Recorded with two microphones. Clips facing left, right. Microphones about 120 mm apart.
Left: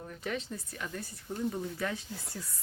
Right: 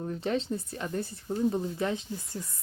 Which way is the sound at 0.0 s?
30° right (ahead or behind).